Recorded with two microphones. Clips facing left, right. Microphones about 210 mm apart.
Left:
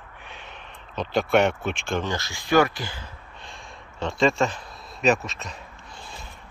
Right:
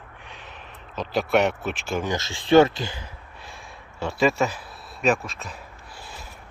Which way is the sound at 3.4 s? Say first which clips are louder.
Even; 5° right (ahead or behind).